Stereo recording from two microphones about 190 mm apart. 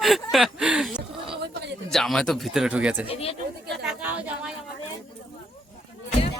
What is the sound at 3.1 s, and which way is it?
Speech, 30° left (ahead or behind).